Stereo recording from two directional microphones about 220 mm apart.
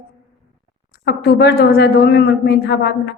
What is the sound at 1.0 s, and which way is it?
A woman's voice, 45° left (ahead or behind).